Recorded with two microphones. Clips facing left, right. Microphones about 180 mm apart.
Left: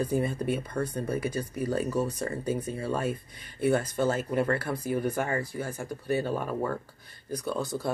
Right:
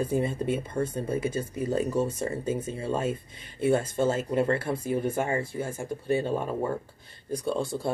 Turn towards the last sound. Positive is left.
turn(degrees=-25)  # may be behind; listen again after turning